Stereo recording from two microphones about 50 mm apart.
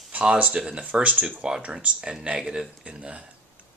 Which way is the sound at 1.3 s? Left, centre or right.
Centre.